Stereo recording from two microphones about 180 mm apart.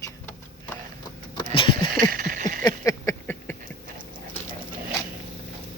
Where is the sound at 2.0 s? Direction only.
50° right (ahead or behind).